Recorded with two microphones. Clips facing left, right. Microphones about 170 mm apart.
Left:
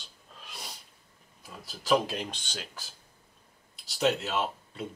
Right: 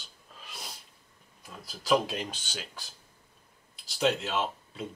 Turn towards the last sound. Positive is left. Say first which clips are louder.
# even
turn(degrees=0)  # may be behind; listen again after turning